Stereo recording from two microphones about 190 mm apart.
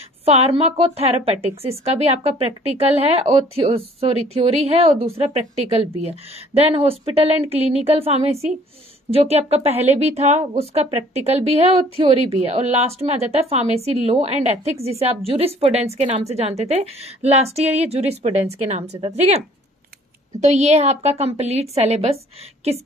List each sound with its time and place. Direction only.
0.2 s a woman's voice: 30° right (ahead or behind)